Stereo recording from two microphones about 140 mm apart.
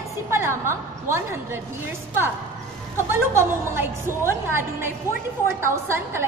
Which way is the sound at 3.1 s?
20° right (ahead or behind).